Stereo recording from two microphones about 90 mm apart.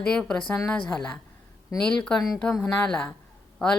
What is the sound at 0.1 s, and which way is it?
Speech, 10° left (ahead or behind).